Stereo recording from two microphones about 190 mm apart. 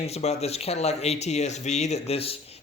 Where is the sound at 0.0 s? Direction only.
35° left (ahead or behind).